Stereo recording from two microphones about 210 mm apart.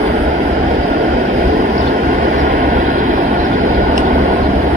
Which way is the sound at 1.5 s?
40° right (ahead or behind).